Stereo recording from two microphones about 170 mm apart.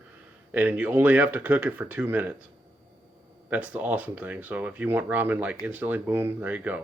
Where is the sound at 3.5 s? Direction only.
10° right (ahead or behind).